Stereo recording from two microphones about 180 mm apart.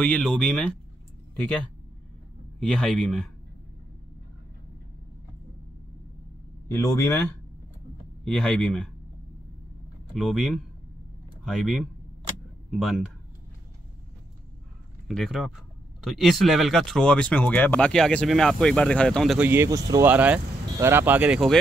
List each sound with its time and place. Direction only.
0.0 s speech: 5° left (ahead or behind)
2.6 s speech: centre (ahead or behind)
6.7 s speech: 15° left (ahead or behind)
8.3 s speech: 5° left (ahead or behind)
10.1 s speech: centre (ahead or behind)
15.0 s speech: centre (ahead or behind)
19.4 s speech: 15° right (ahead or behind)